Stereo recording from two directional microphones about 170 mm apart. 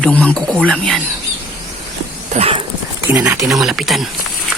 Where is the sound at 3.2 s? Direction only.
15° right (ahead or behind).